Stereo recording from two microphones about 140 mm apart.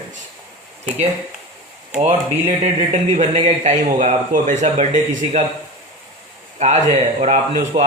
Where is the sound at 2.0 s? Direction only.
50° right (ahead or behind).